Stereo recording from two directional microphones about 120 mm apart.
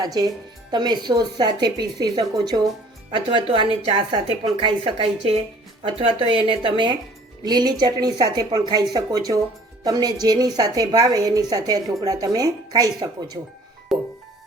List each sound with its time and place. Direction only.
0.0 s a woman's voice: 35° right (ahead or behind)
13.9 s music: centre (ahead or behind)